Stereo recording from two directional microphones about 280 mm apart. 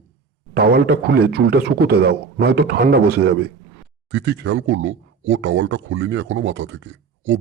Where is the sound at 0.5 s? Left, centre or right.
Right.